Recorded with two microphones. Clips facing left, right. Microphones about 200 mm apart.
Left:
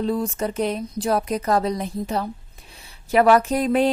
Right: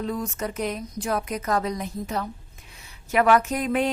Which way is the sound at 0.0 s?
30° left (ahead or behind).